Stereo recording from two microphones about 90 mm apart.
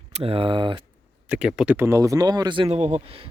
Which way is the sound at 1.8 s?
35° right (ahead or behind).